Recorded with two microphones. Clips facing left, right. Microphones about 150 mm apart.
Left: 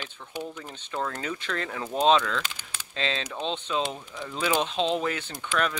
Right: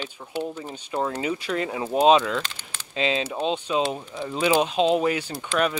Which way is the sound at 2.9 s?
10° right (ahead or behind).